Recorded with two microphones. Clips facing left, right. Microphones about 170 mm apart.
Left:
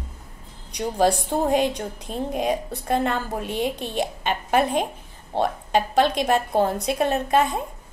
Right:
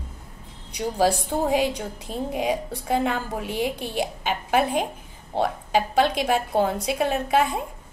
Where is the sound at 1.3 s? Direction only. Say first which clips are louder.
Left 1 dB; 5° right (ahead or behind).